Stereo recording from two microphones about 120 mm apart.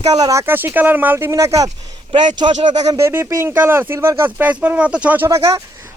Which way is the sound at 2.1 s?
40° right (ahead or behind).